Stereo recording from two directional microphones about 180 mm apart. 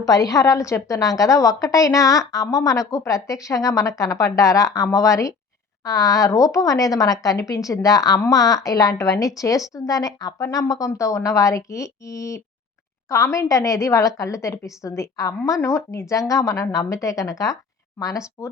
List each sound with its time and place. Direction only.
0.0 s a woman's voice: 20° left (ahead or behind)